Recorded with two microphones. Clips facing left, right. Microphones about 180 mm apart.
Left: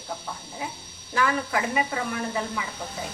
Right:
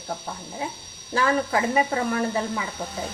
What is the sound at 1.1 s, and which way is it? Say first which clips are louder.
Speech: right 3 dB; 30° right (ahead or behind).